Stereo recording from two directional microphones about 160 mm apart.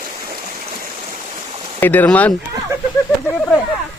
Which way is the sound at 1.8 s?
10° left (ahead or behind).